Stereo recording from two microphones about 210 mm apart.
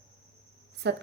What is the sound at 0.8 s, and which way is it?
Speech, 55° right (ahead or behind).